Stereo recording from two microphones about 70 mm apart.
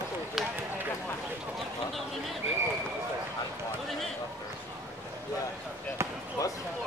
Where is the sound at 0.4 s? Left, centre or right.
Centre.